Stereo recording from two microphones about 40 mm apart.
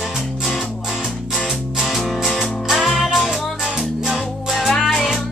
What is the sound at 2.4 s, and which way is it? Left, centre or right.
Music, centre.